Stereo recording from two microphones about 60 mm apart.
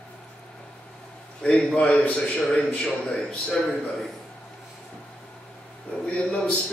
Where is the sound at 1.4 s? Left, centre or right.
Centre.